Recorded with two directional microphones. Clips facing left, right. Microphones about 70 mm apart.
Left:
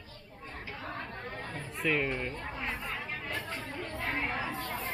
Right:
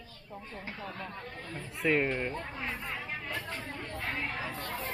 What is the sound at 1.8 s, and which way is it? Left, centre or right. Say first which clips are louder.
Speech: right 2 dB; centre.